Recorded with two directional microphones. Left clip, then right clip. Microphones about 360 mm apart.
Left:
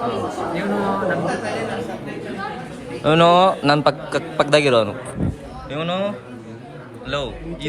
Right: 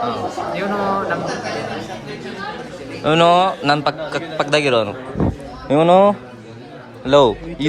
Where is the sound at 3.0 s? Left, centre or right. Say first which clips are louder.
Even; centre.